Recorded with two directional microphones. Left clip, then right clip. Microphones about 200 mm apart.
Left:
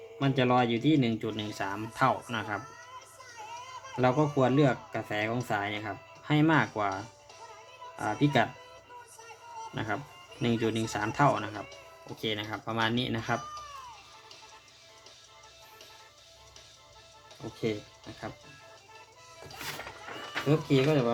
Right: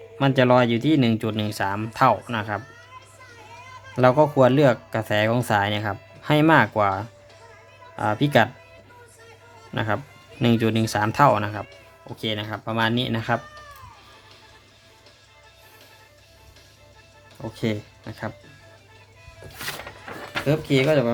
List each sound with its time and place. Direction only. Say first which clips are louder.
0.2 s speech: right 9 dB; 30° right (ahead or behind); by 2.6 s 15° right (ahead or behind)
3.9 s speech: right 10 dB; 30° right (ahead or behind)
9.7 s speech: right 10 dB; 25° right (ahead or behind)
12.2 s speech: right 5 dB; 15° right (ahead or behind)
17.7 s speech: right 5 dB; 30° right (ahead or behind)
20.7 s speech: right 8 dB; 25° right (ahead or behind)